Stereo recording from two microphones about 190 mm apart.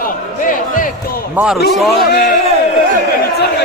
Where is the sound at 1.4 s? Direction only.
10° right (ahead or behind).